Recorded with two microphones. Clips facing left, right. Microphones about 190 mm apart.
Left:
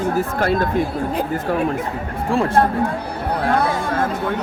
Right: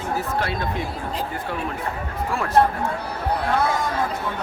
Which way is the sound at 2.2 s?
30° left (ahead or behind).